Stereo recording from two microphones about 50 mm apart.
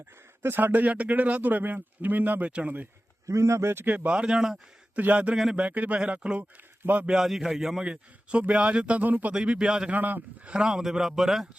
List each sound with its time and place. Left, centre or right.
0.4 s a man's voice: right
3.2 s a man's voice: right
3.8 s speech: right; by 4.6 s centre
4.9 s speech: right
7.1 s speech: centre
8.3 s speech: right
9.0 s a man's voice: right
9.3 s speech: centre
9.9 s a man's voice: right
10.5 s speech: centre